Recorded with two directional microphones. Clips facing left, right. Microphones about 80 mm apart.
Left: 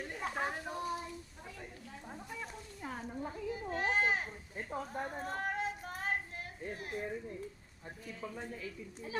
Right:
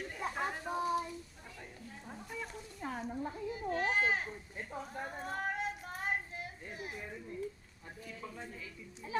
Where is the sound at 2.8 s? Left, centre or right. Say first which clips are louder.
Right 3 dB; centre.